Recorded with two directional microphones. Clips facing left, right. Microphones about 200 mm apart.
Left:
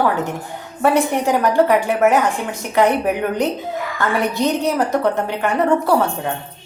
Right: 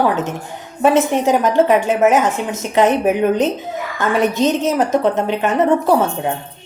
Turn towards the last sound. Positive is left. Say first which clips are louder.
# right 2 dB
turn(degrees=-20)  # may be behind; listen again after turning